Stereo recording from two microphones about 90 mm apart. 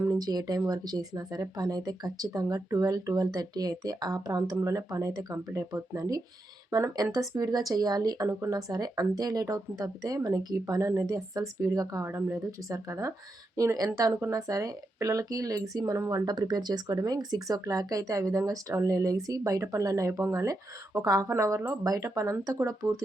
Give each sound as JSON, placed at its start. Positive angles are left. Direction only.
{"t": 0.2, "sound": "speech", "side_deg": -45}